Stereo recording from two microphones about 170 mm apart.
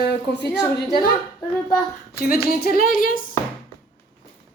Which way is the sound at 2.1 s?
60° left (ahead or behind).